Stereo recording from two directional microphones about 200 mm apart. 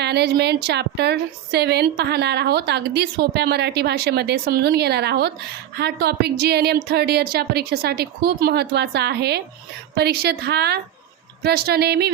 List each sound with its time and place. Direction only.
0.0 s a woman's voice: 55° right (ahead or behind)